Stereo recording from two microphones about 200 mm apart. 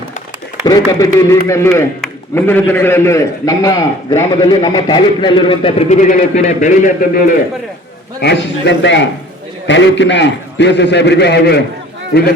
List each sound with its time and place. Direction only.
0.6 s a man's voice: 20° left (ahead or behind); by 7.3 s 45° left (ahead or behind)
8.2 s a man's voice: 60° left (ahead or behind)